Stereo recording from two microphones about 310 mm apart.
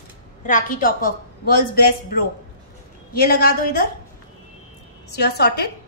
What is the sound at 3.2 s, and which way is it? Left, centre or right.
Speech, left.